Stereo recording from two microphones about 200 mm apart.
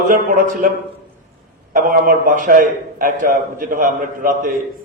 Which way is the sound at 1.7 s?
45° right (ahead or behind).